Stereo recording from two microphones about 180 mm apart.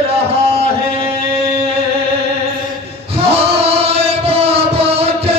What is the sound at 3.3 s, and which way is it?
Music, 35° right (ahead or behind).